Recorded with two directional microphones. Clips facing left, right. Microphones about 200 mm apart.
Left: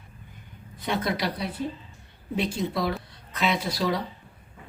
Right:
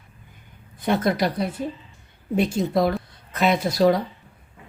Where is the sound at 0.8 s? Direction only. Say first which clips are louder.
Right 6 dB; 50° right (ahead or behind).